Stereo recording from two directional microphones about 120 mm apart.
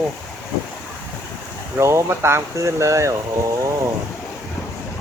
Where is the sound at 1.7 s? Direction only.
20° right (ahead or behind).